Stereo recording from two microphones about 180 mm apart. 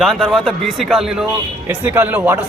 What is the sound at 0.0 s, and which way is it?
A man's voice, centre (ahead or behind).